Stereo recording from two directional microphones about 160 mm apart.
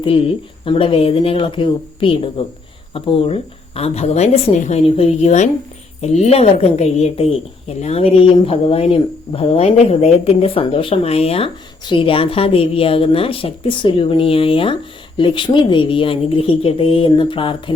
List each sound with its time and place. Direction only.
0.6 s a woman's voice: 35° left (ahead or behind)